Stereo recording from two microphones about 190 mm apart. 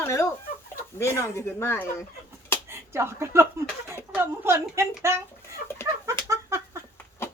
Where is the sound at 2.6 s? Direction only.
15° right (ahead or behind).